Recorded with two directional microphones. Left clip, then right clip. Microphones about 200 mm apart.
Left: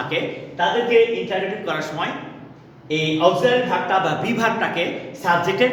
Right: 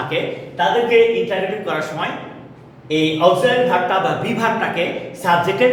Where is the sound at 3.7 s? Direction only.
15° left (ahead or behind).